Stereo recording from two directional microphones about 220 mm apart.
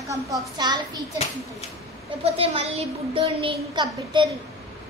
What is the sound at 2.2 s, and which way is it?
A woman's voice, 25° right (ahead or behind).